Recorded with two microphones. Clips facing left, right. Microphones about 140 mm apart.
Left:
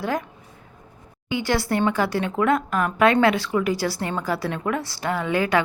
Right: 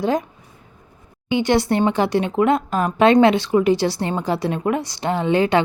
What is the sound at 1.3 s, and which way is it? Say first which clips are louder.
Speech: right 5 dB; 20° right (ahead or behind).